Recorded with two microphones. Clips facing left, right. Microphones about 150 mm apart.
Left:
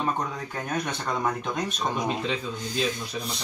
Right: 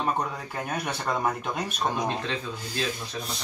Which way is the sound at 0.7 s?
10° right (ahead or behind).